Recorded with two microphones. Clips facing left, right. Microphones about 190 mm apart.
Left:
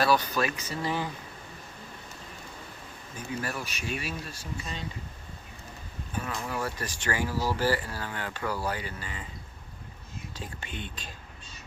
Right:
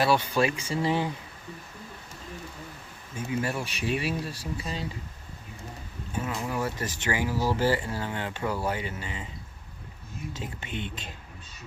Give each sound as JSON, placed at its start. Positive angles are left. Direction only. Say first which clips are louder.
{"t": 0.0, "sound": "speech", "louder": "right 2 dB", "side_deg": -25}
{"t": 3.2, "sound": "speech", "louder": "right 5 dB", "side_deg": -25}
{"t": 6.1, "sound": "speech", "louder": "right 3 dB", "side_deg": -20}
{"t": 10.3, "sound": "speech", "louder": "right 3 dB", "side_deg": -20}